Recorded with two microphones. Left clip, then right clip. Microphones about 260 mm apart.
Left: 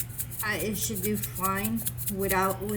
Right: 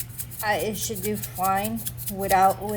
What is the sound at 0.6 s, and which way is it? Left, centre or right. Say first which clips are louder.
Speech: right 3 dB; right.